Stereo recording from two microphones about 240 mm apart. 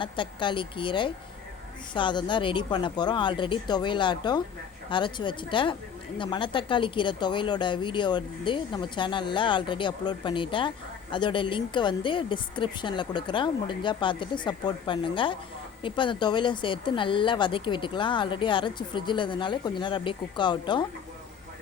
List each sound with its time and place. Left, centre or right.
0.0 s speech: centre